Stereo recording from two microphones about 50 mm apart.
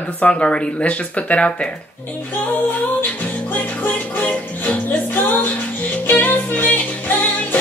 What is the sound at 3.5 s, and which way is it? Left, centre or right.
Music, left.